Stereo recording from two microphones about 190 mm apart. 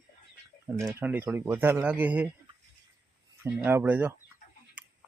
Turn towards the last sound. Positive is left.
turn(degrees=-10)  # may be behind; listen again after turning